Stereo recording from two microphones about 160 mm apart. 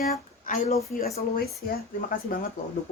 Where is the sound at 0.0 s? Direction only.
50° left (ahead or behind).